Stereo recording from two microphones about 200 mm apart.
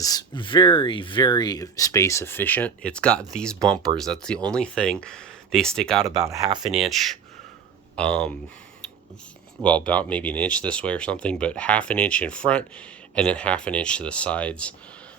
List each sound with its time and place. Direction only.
0.0 s speech: 20° left (ahead or behind); by 6.1 s centre (ahead or behind)
6.2 s speech: 15° right (ahead or behind)
6.6 s speech: centre (ahead or behind)
9.6 s speech: 5° left (ahead or behind)